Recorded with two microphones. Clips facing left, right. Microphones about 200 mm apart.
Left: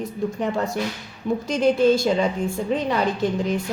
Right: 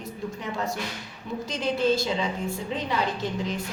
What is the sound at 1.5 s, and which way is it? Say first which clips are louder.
A woman's voice: left 7 dB; 50° left (ahead or behind).